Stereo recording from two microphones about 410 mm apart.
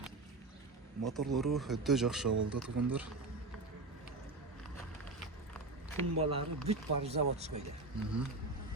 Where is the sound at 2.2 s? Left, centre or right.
Right.